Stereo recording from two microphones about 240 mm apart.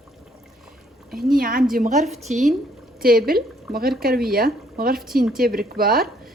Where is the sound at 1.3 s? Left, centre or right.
Right.